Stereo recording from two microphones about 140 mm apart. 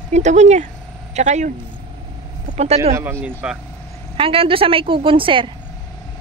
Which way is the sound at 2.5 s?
50° right (ahead or behind).